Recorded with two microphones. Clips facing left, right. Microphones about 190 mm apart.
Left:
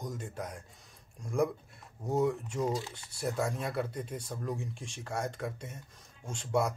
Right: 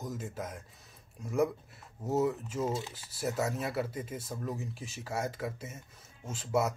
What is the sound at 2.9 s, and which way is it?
Speech, 5° right (ahead or behind).